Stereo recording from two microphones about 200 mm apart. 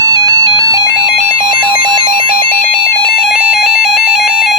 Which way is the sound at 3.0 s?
Centre (ahead or behind).